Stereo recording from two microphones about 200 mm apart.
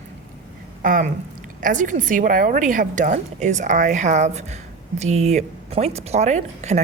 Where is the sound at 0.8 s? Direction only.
40° right (ahead or behind).